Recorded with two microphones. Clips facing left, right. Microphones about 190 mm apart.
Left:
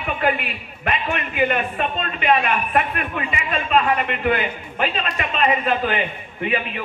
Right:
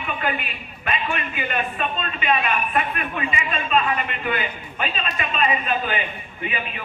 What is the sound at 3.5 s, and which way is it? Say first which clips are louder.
A man's voice: left 4 dB; 60° left (ahead or behind).